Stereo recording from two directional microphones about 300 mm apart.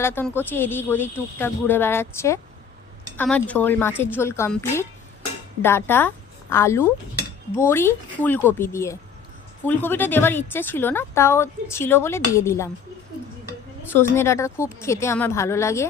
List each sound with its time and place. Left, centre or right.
0.0 s a woman's voice: centre
13.9 s a woman's voice: centre